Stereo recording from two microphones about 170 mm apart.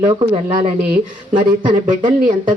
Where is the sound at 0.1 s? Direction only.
30° right (ahead or behind).